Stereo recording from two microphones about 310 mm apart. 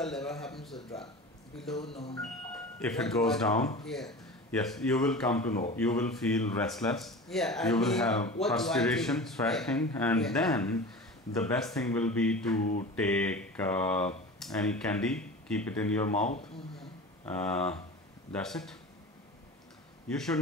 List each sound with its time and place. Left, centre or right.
0.0 s speech: centre
2.0 s speech: centre
2.2 s speech: centre
20.1 s speech: centre